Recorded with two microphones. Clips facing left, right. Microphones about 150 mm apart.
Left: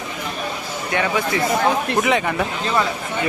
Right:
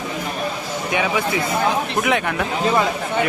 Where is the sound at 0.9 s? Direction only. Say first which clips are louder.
Even; 10° right (ahead or behind).